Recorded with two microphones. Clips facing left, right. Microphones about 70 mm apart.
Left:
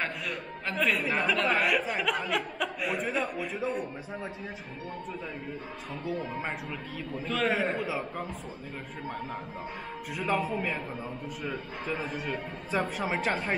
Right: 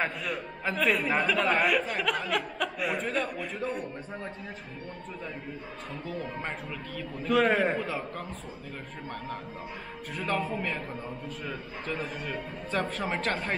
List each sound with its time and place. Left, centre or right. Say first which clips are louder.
0.0 s speech: right 2 dB; centre
6.0 s a man's voice: left 3 dB; centre
7.2 s speech: right 5 dB; centre
7.5 s a man's voice: right 2 dB; centre
10.1 s a man's voice: left 1 dB; centre